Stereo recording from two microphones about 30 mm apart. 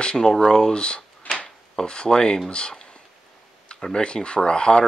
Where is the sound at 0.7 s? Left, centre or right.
Left.